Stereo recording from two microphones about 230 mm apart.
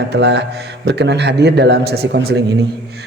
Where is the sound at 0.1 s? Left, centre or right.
Right.